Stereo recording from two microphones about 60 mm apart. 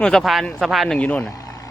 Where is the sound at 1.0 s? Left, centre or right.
Left.